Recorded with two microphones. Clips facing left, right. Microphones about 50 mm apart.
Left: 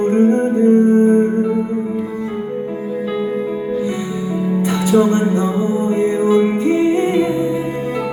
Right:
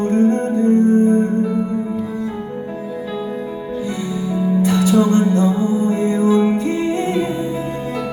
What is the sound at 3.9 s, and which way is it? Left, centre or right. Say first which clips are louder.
Music: left 1 dB; left.